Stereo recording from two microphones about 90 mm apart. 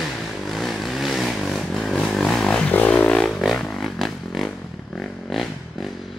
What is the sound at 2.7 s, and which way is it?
Music, 20° left (ahead or behind).